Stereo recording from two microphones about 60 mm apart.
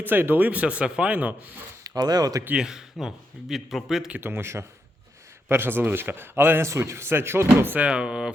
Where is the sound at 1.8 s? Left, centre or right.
Right.